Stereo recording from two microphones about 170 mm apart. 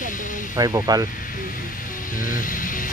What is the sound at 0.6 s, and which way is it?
Speech, 20° right (ahead or behind).